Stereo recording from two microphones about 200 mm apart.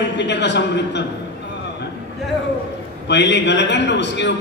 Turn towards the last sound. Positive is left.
turn(degrees=60)  # may be behind; listen again after turning